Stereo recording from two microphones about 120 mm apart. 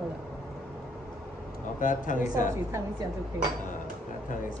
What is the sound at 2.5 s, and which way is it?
Speech, 25° right (ahead or behind).